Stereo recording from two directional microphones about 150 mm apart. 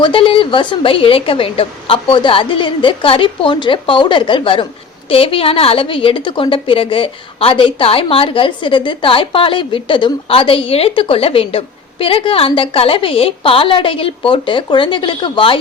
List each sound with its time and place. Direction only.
0.0 s a woman's voice: 35° left (ahead or behind)